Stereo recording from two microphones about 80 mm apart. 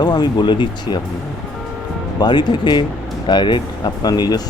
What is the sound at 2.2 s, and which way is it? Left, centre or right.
Speech, left.